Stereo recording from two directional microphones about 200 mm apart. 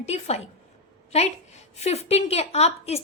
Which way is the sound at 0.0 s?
30° left (ahead or behind).